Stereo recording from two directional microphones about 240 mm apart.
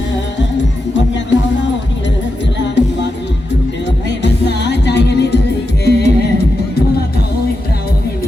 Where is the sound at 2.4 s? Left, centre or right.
Left.